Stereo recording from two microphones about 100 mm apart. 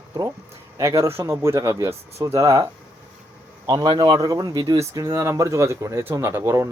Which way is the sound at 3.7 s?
45° right (ahead or behind).